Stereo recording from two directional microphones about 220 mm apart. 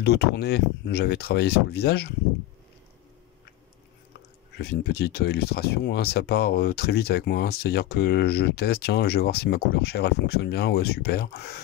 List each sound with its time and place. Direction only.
0.0 s speech: 45° left (ahead or behind)
4.6 s speech: 45° left (ahead or behind)